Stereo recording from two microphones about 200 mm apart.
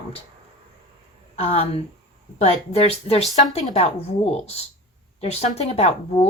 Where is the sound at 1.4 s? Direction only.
30° left (ahead or behind).